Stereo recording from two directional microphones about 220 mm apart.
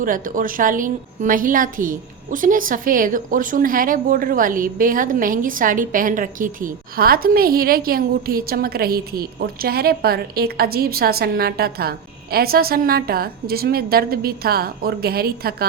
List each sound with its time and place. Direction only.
0.0 s a woman's voice: 40° right (ahead or behind)